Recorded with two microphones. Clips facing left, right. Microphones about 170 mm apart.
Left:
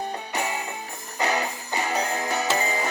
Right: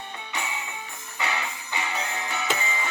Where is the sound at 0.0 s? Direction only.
40° left (ahead or behind).